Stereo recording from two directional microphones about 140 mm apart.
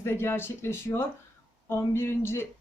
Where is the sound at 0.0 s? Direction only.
15° left (ahead or behind).